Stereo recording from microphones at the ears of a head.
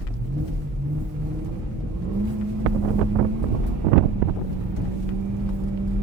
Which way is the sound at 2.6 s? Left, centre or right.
Right.